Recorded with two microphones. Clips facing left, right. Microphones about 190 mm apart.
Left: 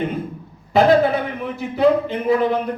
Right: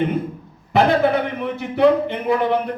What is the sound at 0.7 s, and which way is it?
A man's voice, 60° right (ahead or behind).